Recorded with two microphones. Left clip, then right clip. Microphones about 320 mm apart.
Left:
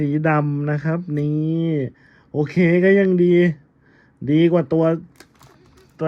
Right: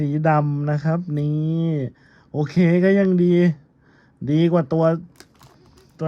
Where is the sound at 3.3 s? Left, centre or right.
Centre.